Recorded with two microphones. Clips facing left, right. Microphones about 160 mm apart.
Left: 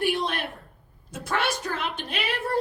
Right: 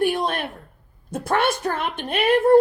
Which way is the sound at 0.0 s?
50° right (ahead or behind).